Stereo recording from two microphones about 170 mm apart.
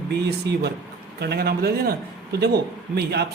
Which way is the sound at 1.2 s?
70° right (ahead or behind).